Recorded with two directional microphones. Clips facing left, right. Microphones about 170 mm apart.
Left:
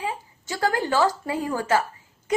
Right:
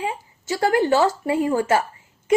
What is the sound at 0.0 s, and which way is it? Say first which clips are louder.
A woman's voice: right 3 dB; 20° right (ahead or behind).